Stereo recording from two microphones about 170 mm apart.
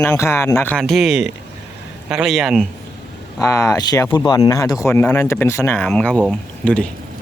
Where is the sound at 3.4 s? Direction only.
20° left (ahead or behind).